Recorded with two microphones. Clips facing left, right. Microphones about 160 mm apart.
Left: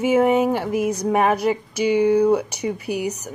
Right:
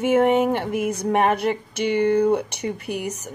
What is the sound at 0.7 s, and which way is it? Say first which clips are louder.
Speech: left 2 dB; 55° right (ahead or behind).